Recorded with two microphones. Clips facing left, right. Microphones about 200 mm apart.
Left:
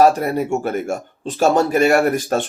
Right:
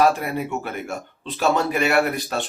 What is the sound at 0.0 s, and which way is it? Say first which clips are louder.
Speech: left 5 dB; 40° left (ahead or behind).